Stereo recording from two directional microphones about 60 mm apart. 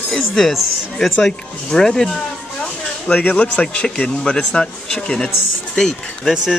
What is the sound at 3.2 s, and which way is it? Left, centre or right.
A man's voice, left.